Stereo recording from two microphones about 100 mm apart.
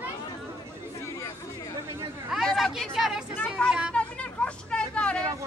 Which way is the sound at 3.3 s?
10° left (ahead or behind).